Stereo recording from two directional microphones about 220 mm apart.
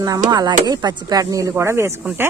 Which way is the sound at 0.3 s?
15° right (ahead or behind).